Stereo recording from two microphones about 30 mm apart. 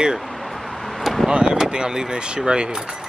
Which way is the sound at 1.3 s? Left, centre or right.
Right.